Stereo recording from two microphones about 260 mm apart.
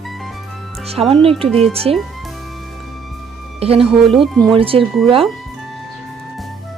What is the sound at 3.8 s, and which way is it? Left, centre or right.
Speech, centre.